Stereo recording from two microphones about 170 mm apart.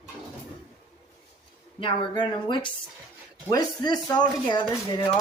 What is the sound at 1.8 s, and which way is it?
Speech, 30° left (ahead or behind).